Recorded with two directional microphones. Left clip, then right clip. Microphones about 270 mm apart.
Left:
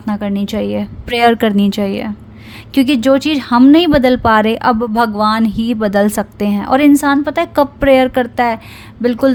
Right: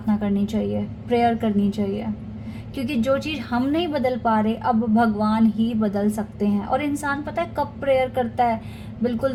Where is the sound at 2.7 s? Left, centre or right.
Left.